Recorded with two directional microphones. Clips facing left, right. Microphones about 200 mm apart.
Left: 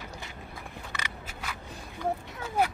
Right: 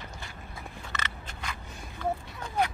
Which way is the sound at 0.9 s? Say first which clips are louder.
Right 1 dB; 10° left (ahead or behind).